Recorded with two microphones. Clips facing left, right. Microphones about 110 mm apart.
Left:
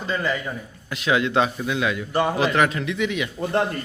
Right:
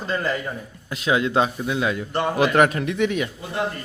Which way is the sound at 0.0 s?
Centre (ahead or behind).